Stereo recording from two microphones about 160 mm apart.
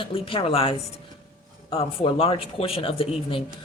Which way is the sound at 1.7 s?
35° left (ahead or behind).